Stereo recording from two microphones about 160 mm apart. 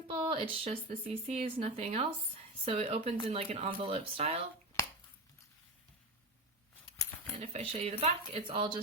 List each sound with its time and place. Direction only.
0.1 s speech: 35° right (ahead or behind)
7.3 s speech: 40° right (ahead or behind)